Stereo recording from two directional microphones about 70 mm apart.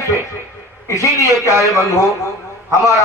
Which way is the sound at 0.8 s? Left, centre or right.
Left.